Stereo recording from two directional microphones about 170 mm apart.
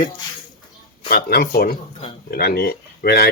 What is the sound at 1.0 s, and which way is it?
Speech, 65° left (ahead or behind).